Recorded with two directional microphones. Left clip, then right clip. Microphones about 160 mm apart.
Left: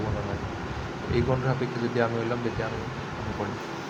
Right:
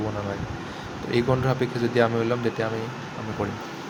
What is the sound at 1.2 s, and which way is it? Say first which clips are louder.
Speech: right 4 dB; 35° right (ahead or behind).